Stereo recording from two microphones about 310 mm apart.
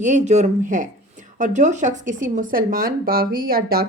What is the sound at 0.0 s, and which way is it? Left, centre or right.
Speech, right.